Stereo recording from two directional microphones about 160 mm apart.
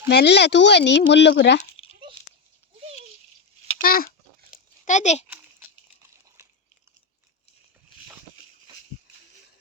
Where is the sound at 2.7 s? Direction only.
45° right (ahead or behind).